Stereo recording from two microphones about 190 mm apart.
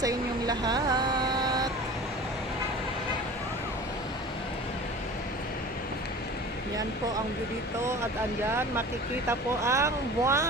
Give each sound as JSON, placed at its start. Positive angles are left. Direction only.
{"t": 0.0, "sound": "vehicle", "side_deg": -20}
{"t": 9.3, "sound": "speech", "side_deg": -15}